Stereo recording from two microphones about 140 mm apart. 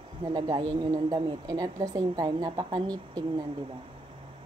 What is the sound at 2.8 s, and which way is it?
Speech, 10° left (ahead or behind).